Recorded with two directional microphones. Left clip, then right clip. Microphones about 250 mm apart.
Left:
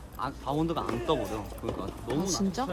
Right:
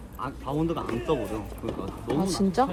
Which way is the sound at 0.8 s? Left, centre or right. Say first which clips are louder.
Right 1 dB; left.